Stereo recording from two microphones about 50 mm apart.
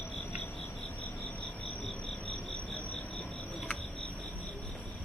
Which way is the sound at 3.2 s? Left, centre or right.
Left.